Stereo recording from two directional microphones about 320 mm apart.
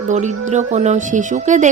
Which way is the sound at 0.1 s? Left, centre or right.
Right.